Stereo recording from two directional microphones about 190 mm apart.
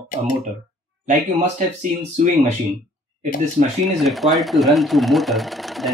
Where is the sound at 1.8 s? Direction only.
40° right (ahead or behind).